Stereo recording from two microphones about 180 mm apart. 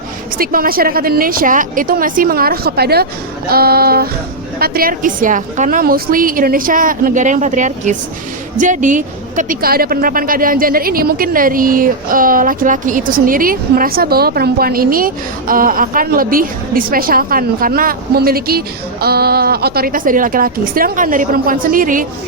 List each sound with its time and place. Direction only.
0.3 s a woman's voice: 55° right (ahead or behind)